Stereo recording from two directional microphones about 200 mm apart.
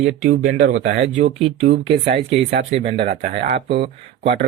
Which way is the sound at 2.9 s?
50° right (ahead or behind).